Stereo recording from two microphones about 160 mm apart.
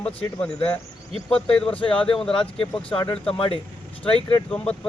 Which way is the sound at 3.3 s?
35° left (ahead or behind).